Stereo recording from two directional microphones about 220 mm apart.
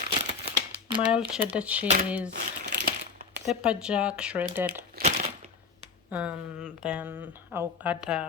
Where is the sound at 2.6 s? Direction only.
50° right (ahead or behind).